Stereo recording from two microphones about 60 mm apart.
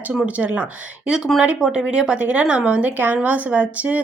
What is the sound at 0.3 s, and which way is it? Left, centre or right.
Speech, right.